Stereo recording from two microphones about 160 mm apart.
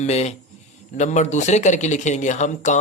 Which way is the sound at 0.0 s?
45° left (ahead or behind).